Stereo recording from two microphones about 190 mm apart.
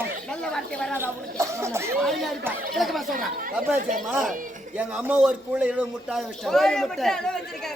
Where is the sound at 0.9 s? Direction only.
15° right (ahead or behind).